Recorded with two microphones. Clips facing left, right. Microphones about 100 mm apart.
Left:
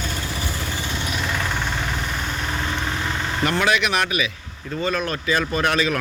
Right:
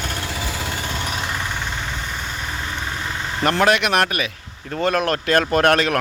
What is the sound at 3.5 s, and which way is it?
Speech, 50° right (ahead or behind).